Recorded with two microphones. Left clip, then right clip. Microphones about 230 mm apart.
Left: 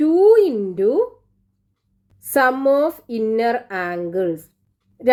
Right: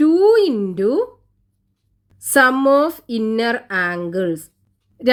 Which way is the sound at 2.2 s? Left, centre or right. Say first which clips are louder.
Right 3 dB; right.